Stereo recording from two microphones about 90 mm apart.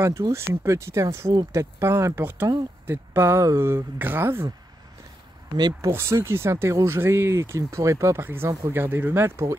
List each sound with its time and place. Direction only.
0.0 s speech: 35° right (ahead or behind)
5.8 s speech: 30° right (ahead or behind)